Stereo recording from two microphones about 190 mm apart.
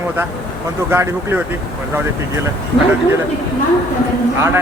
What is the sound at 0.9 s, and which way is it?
Speech, 10° right (ahead or behind).